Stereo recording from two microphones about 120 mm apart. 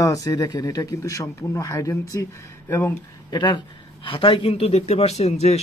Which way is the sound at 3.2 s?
40° left (ahead or behind).